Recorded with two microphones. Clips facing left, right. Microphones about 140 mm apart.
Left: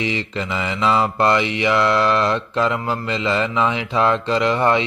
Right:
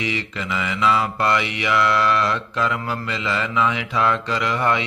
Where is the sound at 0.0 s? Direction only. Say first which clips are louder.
Left 3 dB; 30° left (ahead or behind).